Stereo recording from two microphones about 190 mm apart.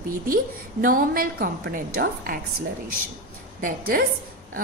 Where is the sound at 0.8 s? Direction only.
45° right (ahead or behind).